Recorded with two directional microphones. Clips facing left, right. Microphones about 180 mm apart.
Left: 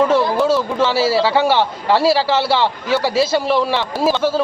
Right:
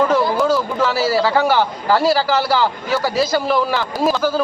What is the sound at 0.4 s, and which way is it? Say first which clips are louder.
A man's voice: left 1 dB; 25° left (ahead or behind).